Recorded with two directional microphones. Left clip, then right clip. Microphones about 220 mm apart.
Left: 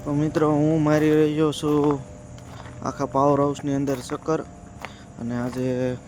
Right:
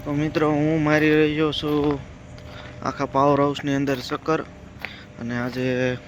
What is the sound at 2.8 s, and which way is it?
Speech, 15° left (ahead or behind).